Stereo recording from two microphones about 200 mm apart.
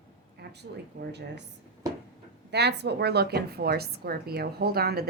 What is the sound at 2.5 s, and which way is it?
A woman's voice, 55° right (ahead or behind).